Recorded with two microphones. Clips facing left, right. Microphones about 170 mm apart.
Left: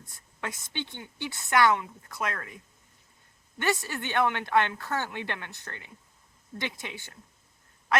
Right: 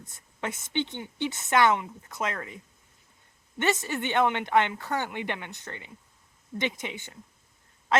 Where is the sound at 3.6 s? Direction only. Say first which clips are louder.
Right 2 dB; 20° right (ahead or behind).